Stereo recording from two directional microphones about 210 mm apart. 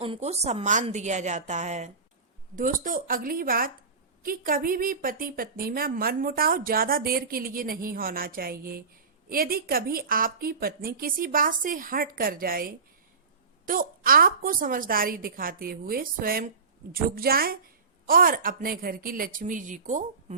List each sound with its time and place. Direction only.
0.0 s a woman's voice: 30° right (ahead or behind)